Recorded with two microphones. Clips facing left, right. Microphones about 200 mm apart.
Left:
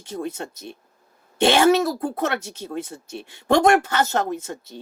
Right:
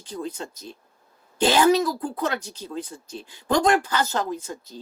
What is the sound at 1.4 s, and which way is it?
Speech, 70° left (ahead or behind).